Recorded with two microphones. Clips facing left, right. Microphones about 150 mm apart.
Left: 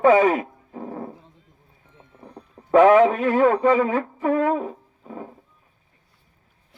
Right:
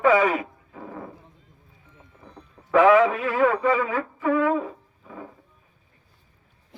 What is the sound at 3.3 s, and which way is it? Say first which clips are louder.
Speech: left 3 dB; 30° left (ahead or behind).